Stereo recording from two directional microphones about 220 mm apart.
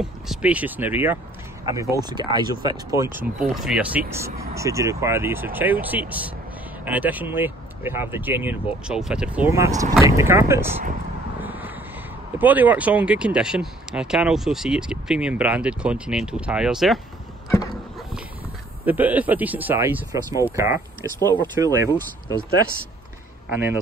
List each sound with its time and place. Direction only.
0.0 s speech: 5° right (ahead or behind)
3.3 s speech: 5° right (ahead or behind)
11.4 s a sound: 10° right (ahead or behind)
12.4 s speech: 10° right (ahead or behind)
18.9 s speech: 5° right (ahead or behind)
23.5 s speech: 10° right (ahead or behind)